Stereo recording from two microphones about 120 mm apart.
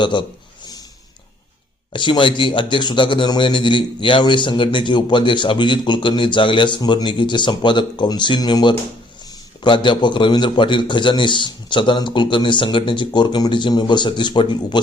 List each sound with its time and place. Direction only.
0.0 s a man's voice: 40° left (ahead or behind)
1.9 s a man's voice: 40° left (ahead or behind)